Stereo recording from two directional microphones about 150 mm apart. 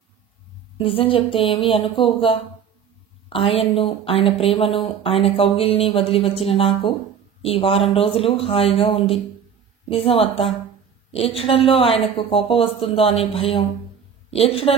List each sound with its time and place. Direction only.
0.7 s speech: 35° left (ahead or behind)